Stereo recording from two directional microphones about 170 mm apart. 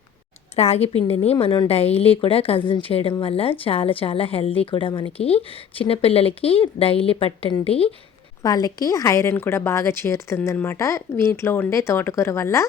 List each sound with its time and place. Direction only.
0.5 s a woman's voice: 35° left (ahead or behind)
8.4 s speech: 20° left (ahead or behind)